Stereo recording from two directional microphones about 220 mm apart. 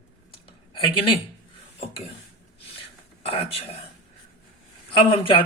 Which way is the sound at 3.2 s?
25° left (ahead or behind).